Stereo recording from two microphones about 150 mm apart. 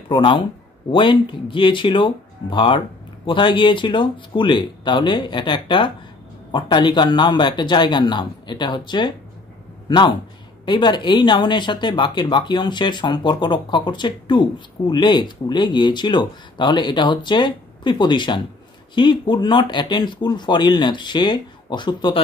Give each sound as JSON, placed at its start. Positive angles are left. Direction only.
{"t": 0.1, "sound": "speech", "side_deg": 35}